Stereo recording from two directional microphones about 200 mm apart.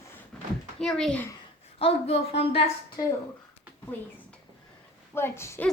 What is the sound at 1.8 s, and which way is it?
Speech, 30° left (ahead or behind).